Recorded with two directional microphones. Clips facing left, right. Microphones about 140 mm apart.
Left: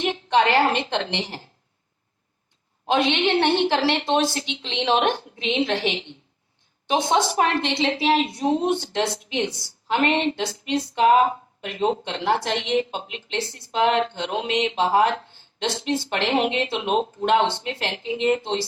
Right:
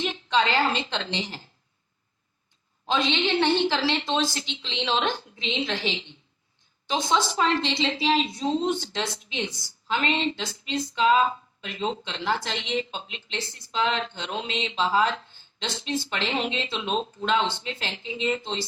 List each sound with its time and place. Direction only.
0.0 s speech: 60° left (ahead or behind)
2.8 s speech: 60° left (ahead or behind)